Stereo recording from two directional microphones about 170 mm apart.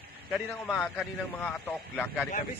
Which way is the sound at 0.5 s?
10° left (ahead or behind).